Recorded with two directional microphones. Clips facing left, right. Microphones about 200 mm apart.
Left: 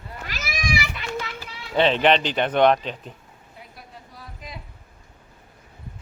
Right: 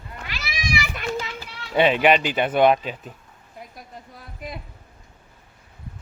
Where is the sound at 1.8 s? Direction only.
10° right (ahead or behind).